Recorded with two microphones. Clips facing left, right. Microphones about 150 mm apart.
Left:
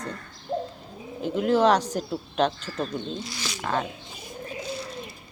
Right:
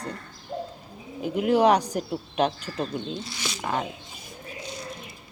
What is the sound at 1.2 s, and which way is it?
Speech, 10° right (ahead or behind).